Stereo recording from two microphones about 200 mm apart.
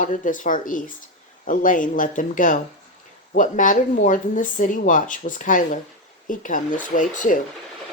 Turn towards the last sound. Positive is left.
turn(degrees=40)  # may be behind; listen again after turning